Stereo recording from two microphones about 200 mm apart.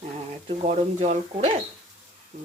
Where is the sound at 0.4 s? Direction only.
30° right (ahead or behind).